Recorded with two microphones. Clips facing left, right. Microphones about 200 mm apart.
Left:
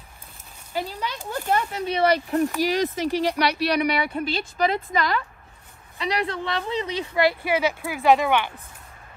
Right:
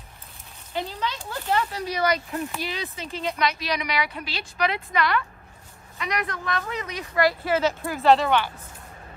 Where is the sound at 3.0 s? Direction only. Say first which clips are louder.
Left 5 dB; 75° left (ahead or behind).